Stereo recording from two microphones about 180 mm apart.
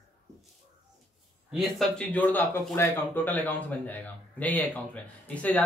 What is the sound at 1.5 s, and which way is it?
Speech, centre (ahead or behind).